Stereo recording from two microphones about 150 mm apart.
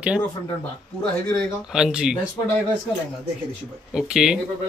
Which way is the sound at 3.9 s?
5° right (ahead or behind).